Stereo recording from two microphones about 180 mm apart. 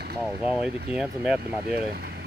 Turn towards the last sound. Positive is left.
turn(degrees=-5)  # may be behind; listen again after turning